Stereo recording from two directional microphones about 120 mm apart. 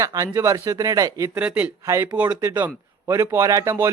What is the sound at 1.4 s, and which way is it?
Speech, 10° right (ahead or behind).